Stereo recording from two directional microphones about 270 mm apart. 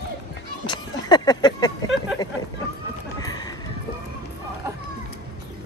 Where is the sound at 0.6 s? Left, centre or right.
Centre.